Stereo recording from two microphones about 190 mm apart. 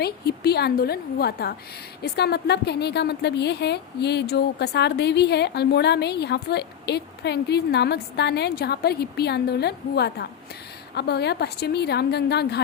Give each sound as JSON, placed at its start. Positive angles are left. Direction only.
{"t": 0.0, "sound": "a woman's voice", "side_deg": 55}